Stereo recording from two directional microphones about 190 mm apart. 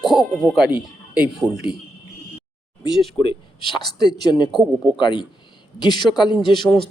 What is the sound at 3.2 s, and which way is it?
A man's voice, 20° left (ahead or behind).